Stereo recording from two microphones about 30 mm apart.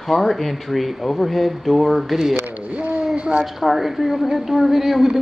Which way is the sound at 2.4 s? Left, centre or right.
Right.